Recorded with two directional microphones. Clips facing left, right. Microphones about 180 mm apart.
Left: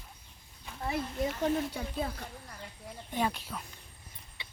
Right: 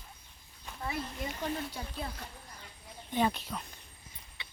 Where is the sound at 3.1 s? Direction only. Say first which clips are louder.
Right 2 dB; 5° left (ahead or behind).